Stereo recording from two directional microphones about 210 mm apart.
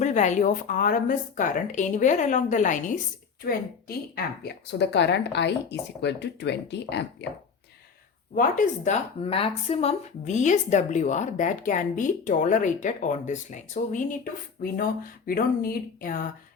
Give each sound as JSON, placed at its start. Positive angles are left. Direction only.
{"t": 0.0, "sound": "a woman's voice", "side_deg": 35}
{"t": 8.4, "sound": "speech", "side_deg": 35}
{"t": 15.3, "sound": "speech", "side_deg": 45}